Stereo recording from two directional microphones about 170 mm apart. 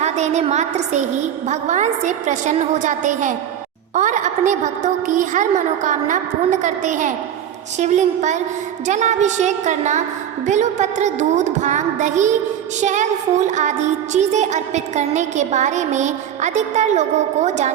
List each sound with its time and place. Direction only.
0.0 s a woman's voice: 40° right (ahead or behind)